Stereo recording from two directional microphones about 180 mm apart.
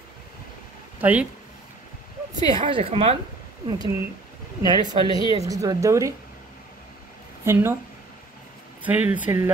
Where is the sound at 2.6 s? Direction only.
30° right (ahead or behind).